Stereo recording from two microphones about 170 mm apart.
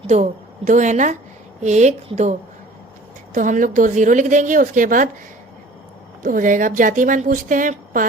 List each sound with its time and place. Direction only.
0.1 s a woman's voice: 45° right (ahead or behind)
3.3 s a woman's voice: 50° right (ahead or behind)
6.2 s a woman's voice: 50° right (ahead or behind)